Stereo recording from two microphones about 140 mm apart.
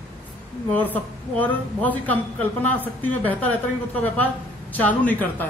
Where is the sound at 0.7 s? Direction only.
10° left (ahead or behind).